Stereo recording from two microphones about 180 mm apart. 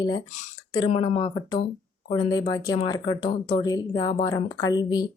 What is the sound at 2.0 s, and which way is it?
Speech, 20° left (ahead or behind).